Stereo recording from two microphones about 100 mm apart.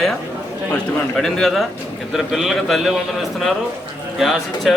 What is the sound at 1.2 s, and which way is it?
A man's voice, 5° left (ahead or behind).